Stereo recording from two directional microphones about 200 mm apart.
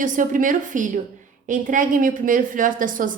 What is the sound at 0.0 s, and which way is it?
A woman's voice, 40° right (ahead or behind).